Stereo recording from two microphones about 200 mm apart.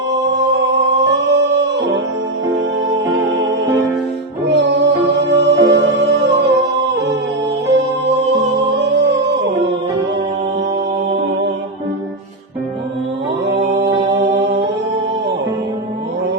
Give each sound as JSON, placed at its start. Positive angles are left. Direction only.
{"t": 0.3, "sound": "music", "side_deg": -60}
{"t": 4.4, "sound": "music", "side_deg": -60}
{"t": 8.5, "sound": "music", "side_deg": -60}
{"t": 13.4, "sound": "music", "side_deg": -60}